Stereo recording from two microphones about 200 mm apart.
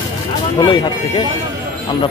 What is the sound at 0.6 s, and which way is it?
Speech, 25° left (ahead or behind).